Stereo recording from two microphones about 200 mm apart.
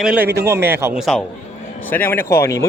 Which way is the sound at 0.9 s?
Centre (ahead or behind).